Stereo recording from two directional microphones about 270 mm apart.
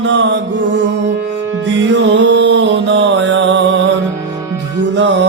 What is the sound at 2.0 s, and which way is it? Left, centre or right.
Music, right.